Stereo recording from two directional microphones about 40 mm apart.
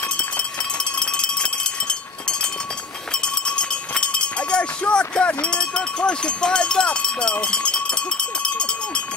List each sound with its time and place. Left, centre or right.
0.9 s cowbell: left
3.1 s run: left
7.3 s cowbell: left